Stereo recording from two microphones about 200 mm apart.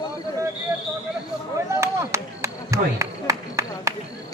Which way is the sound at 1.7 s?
15° right (ahead or behind).